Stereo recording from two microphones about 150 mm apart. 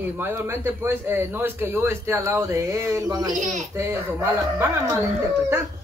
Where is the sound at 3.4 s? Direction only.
55° right (ahead or behind).